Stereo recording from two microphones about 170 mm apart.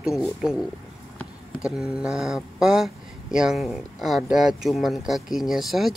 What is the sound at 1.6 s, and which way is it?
Speech, 5° right (ahead or behind).